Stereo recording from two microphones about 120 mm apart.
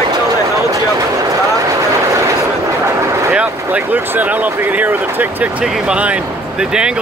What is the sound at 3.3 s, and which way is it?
Speech, 10° right (ahead or behind).